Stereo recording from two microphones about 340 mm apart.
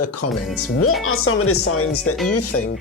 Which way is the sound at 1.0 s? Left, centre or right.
Left.